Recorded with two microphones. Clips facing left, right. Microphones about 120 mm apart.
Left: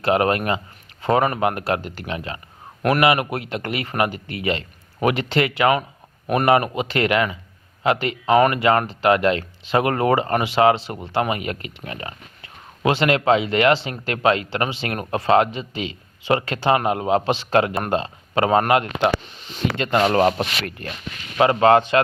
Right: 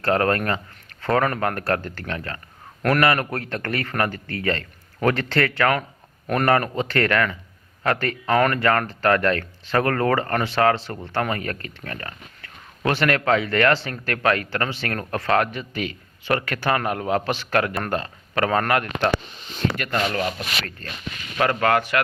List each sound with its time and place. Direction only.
0.0 s speech: 15° left (ahead or behind)
20.0 s speech: 50° left (ahead or behind)
20.8 s speech: 15° left (ahead or behind)